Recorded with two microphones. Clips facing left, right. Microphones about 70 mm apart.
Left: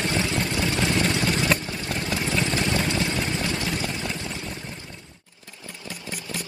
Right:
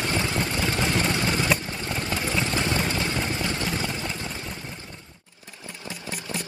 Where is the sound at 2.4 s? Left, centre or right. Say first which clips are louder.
Left 1 dB; right.